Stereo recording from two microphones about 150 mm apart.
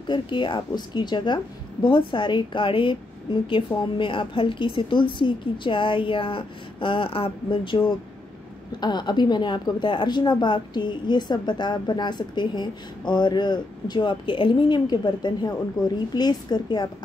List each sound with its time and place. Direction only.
0.1 s a woman's voice: 30° left (ahead or behind)